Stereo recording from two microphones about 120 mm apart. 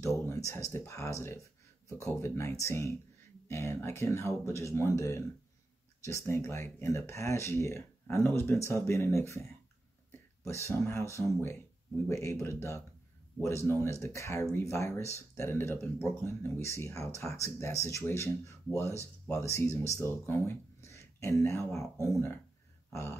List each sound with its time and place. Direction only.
0.0 s speech: 25° left (ahead or behind)